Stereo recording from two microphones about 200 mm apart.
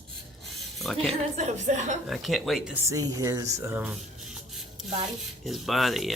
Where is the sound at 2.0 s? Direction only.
Centre (ahead or behind).